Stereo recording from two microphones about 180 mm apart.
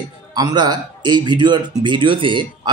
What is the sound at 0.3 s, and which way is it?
Speech, 20° right (ahead or behind).